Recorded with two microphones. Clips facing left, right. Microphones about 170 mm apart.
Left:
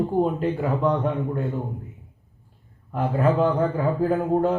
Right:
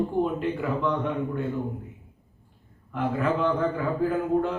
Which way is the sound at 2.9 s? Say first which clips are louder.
Left 4 dB; 40° left (ahead or behind).